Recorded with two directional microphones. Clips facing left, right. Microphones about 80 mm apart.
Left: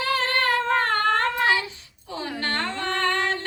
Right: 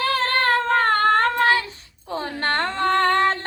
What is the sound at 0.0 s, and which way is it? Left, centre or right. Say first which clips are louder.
Female singing: right 3 dB; right.